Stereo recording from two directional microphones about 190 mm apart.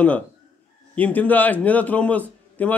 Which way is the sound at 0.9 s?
10° left (ahead or behind).